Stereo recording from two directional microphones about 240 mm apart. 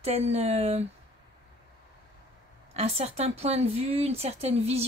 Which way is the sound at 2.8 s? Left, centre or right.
Right.